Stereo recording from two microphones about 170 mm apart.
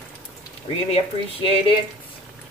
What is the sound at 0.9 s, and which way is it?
Speech, 30° left (ahead or behind).